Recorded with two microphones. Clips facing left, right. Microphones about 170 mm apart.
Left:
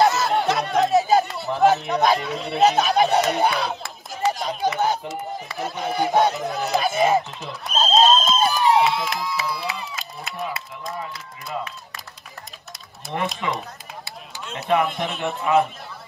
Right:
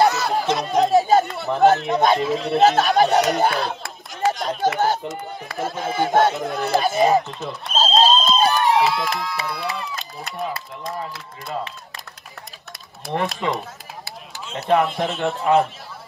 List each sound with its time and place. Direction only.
0.0 s speech: centre (ahead or behind)
14.0 s speech: centre (ahead or behind)